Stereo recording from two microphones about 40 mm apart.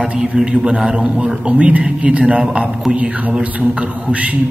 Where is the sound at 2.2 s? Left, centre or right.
Right.